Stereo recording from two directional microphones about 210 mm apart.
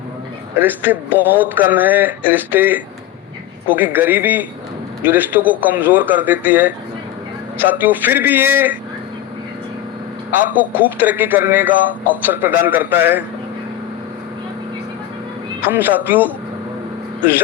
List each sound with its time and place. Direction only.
0.6 s speech: 10° right (ahead or behind)
10.3 s speech: 10° right (ahead or behind)
15.7 s speech: 10° right (ahead or behind)